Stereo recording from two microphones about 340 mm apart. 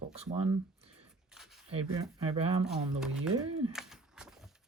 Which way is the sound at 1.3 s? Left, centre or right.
Centre.